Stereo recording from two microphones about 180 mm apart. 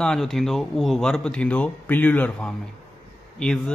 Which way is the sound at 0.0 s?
5° left (ahead or behind).